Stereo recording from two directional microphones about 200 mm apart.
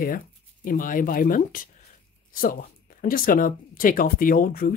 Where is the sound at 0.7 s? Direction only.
45° left (ahead or behind).